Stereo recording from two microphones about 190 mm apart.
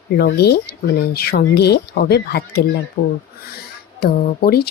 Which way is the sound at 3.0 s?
90° left.